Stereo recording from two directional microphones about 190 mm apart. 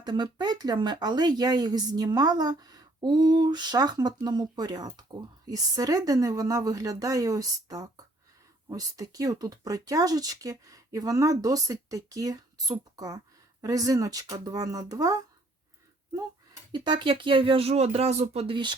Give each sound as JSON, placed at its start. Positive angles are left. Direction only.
{"t": 0.0, "sound": "speech", "side_deg": -20}
{"t": 16.7, "sound": "speech", "side_deg": -25}